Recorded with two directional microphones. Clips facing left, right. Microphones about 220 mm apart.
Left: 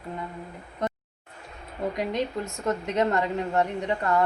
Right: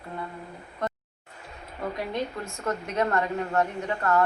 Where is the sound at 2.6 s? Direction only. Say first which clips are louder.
Left 2 dB; 20° left (ahead or behind).